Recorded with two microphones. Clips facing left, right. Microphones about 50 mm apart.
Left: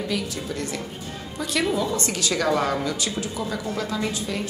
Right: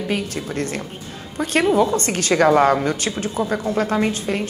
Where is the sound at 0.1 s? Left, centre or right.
Right.